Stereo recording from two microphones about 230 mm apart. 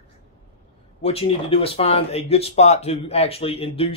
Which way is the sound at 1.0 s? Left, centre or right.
Left.